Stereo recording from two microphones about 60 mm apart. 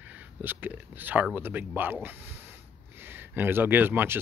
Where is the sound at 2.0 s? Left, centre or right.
Right.